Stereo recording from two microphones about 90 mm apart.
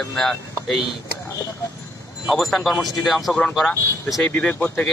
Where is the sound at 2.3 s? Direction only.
Centre (ahead or behind).